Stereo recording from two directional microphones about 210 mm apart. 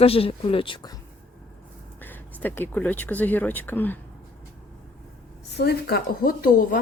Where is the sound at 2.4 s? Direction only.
10° left (ahead or behind).